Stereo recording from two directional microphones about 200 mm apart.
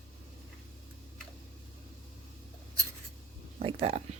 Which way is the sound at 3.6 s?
30° right (ahead or behind).